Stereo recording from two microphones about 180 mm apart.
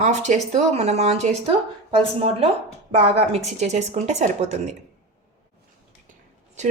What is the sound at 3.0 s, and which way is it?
Speech, 35° right (ahead or behind).